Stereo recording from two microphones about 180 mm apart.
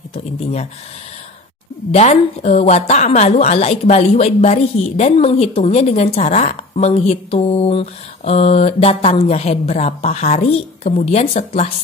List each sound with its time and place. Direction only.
0.1 s a woman's voice: 35° left (ahead or behind)
1.9 s a woman's voice: 40° left (ahead or behind)